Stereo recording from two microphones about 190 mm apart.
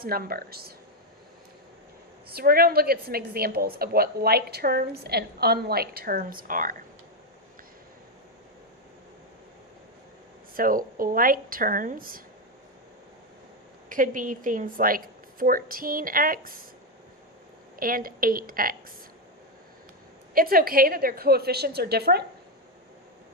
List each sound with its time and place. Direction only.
0.0 s a woman's voice: 50° right (ahead or behind)
2.3 s a woman's voice: 50° right (ahead or behind)
10.5 s a woman's voice: 45° right (ahead or behind)
13.9 s a woman's voice: 45° right (ahead or behind)
17.7 s a woman's voice: 50° right (ahead or behind)
20.3 s a woman's voice: 50° right (ahead or behind)